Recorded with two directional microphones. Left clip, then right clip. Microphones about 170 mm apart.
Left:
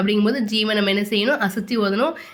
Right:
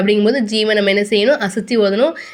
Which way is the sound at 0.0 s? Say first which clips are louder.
Right 7 dB; 15° right (ahead or behind).